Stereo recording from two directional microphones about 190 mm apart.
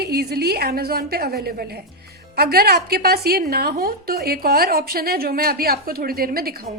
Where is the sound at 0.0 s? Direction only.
55° right (ahead or behind).